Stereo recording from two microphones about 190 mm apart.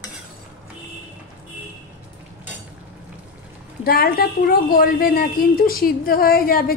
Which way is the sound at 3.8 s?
50° left (ahead or behind).